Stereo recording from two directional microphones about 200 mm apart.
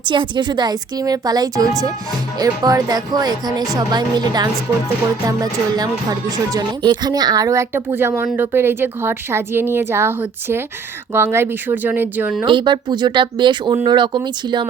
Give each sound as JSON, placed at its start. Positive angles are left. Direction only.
{"t": 0.0, "sound": "speech", "side_deg": -25}
{"t": 12.5, "sound": "speech", "side_deg": -25}